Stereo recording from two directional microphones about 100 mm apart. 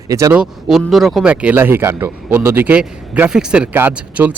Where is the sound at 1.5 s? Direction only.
25° right (ahead or behind).